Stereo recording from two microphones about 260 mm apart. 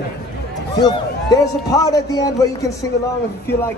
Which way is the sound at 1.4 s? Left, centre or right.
Centre.